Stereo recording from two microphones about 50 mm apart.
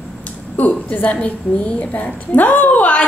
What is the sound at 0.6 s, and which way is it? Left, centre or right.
A woman's voice, left.